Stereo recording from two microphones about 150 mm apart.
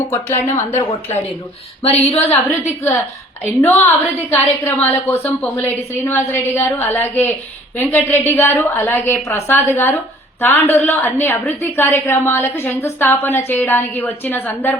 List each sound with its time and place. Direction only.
0.1 s a woman's voice: 20° left (ahead or behind)
2.3 s a woman's voice: 15° left (ahead or behind)